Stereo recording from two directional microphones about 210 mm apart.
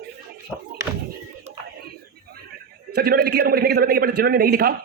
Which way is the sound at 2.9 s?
50° right (ahead or behind).